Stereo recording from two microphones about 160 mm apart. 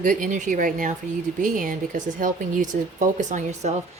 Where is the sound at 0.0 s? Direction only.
55° right (ahead or behind).